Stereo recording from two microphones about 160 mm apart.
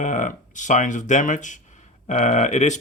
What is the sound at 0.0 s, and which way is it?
Speech, 50° left (ahead or behind).